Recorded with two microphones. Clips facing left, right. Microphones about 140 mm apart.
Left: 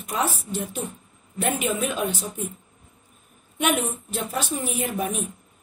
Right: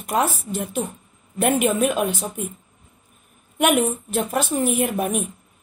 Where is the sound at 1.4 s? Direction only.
55° right (ahead or behind).